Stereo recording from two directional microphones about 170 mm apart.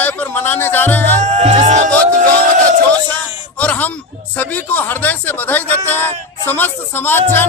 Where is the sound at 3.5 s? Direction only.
10° left (ahead or behind).